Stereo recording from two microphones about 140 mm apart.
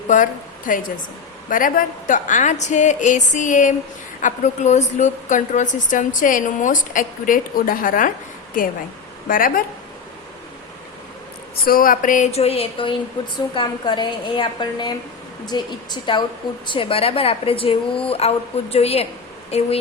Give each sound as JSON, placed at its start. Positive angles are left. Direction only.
{"t": 0.1, "sound": "a woman's voice", "side_deg": 70}
{"t": 9.2, "sound": "speech", "side_deg": 80}
{"t": 11.6, "sound": "speech", "side_deg": 90}
{"t": 12.3, "sound": "a woman's voice", "side_deg": 45}